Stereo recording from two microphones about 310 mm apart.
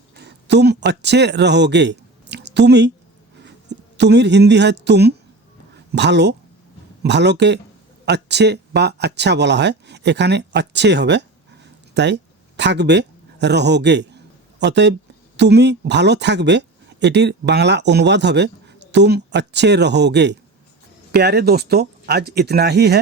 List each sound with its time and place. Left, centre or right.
0.2 s speech: right
5.7 s a sound: right
7.0 s speech: right